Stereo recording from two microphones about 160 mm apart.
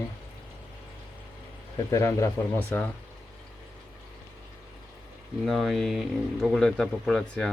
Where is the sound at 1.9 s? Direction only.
20° left (ahead or behind).